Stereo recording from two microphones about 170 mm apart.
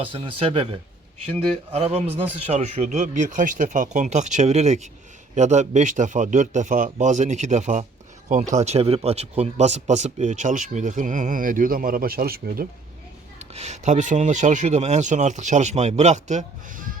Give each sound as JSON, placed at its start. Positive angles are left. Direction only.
{"t": 0.0, "sound": "a man's voice", "side_deg": -30}
{"t": 13.4, "sound": "a man's voice", "side_deg": -40}